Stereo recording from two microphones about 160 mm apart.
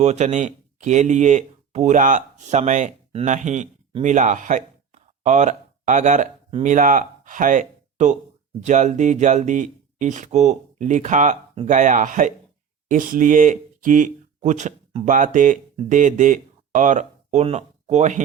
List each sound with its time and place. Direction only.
0.0 s speech: 45° right (ahead or behind)